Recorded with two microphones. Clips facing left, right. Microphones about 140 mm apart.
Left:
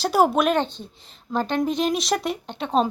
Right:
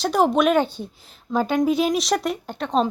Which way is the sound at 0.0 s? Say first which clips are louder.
Right 1 dB; 5° left (ahead or behind).